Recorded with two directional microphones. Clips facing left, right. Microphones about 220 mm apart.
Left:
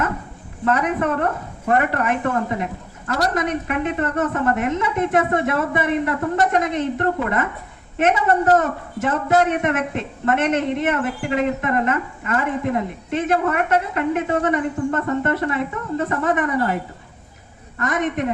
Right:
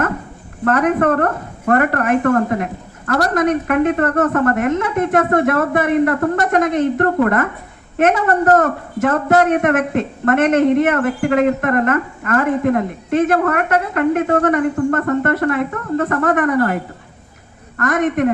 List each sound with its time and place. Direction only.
0.6 s a man's voice: 55° right (ahead or behind)
17.7 s a man's voice: 50° right (ahead or behind)